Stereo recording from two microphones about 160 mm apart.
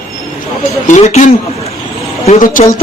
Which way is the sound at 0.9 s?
50° left (ahead or behind).